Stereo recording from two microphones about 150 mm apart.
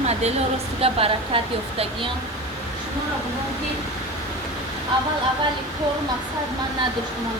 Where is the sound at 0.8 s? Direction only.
40° right (ahead or behind).